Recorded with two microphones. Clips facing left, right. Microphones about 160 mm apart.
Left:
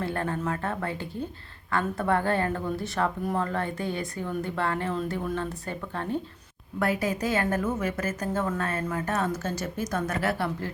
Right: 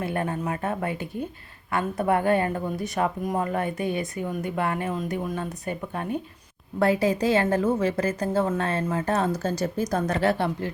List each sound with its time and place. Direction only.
0.0 s a woman's voice: 15° right (ahead or behind)
6.7 s a woman's voice: 35° right (ahead or behind)